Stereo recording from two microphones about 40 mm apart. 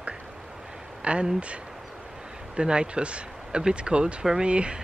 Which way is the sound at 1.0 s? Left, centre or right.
Right.